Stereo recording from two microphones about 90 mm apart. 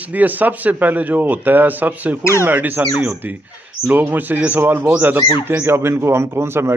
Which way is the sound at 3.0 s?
10° right (ahead or behind).